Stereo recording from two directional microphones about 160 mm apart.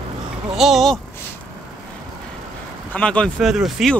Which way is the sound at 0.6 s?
Centre (ahead or behind).